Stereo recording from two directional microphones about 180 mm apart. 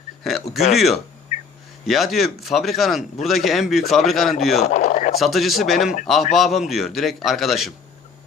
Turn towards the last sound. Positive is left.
turn(degrees=0)  # may be behind; listen again after turning